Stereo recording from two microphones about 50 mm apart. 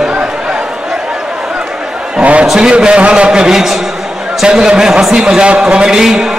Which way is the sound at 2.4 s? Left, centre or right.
Centre.